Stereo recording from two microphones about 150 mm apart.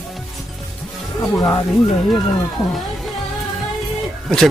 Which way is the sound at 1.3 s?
20° left (ahead or behind).